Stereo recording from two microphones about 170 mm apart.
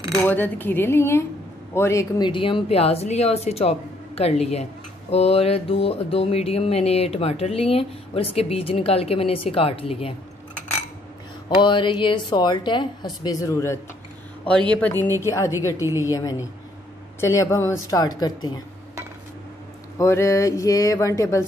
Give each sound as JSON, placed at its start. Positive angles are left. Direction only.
{"t": 0.2, "sound": "speech", "side_deg": 10}
{"t": 1.7, "sound": "a sound", "side_deg": 15}
{"t": 11.4, "sound": "a woman's voice", "side_deg": 30}
{"t": 15.8, "sound": "a woman's voice", "side_deg": -15}
{"t": 16.1, "sound": "a woman's voice", "side_deg": 20}
{"t": 20.0, "sound": "a woman's voice", "side_deg": 15}